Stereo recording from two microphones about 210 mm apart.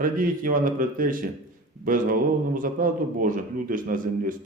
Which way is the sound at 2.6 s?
40° right (ahead or behind).